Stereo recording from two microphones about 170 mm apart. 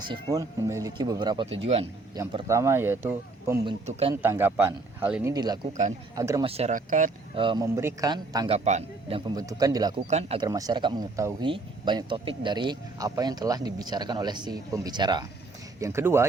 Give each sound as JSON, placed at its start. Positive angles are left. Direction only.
{"t": 0.0, "sound": "speech", "side_deg": -25}
{"t": 1.6, "sound": "a man's voice", "side_deg": -35}
{"t": 2.2, "sound": "speech", "side_deg": -20}
{"t": 5.3, "sound": "speech", "side_deg": -25}
{"t": 6.4, "sound": "speech", "side_deg": -35}
{"t": 7.3, "sound": "speech", "side_deg": -30}
{"t": 7.8, "sound": "speech", "side_deg": -15}
{"t": 8.4, "sound": "a man's voice", "side_deg": -40}
{"t": 9.3, "sound": "speech", "side_deg": -20}
{"t": 10.1, "sound": "a man's voice", "side_deg": -40}
{"t": 10.4, "sound": "speech", "side_deg": -20}